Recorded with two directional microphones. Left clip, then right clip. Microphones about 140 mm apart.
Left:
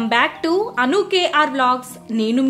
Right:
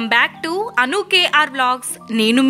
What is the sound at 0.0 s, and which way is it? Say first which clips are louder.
Speech: right 1 dB; 20° right (ahead or behind).